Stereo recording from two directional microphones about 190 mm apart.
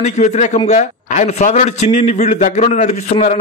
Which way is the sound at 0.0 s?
40° left (ahead or behind).